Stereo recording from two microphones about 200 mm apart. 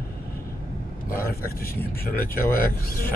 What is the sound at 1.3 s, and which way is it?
Speech, 50° left (ahead or behind).